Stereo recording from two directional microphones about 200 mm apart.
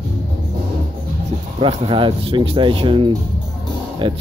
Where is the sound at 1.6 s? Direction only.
25° right (ahead or behind).